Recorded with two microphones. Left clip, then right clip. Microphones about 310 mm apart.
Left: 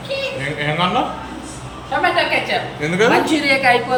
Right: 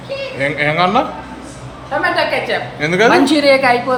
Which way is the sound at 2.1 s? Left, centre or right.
Centre.